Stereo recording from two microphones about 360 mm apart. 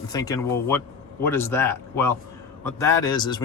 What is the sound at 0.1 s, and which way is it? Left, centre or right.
Speech, centre.